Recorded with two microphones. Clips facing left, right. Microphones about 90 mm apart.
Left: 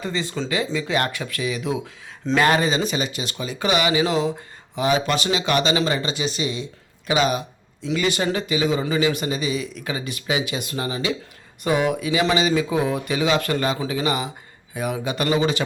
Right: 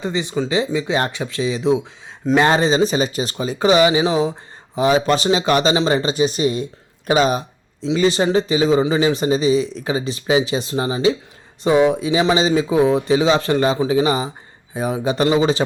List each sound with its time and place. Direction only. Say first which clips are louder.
0.0 s a man's voice: right 5 dB; 20° right (ahead or behind); by 6.7 s 45° right (ahead or behind)
7.1 s a sound: right 4 dB; 35° right (ahead or behind)
7.9 s a man's voice: right 5 dB; 30° right (ahead or behind)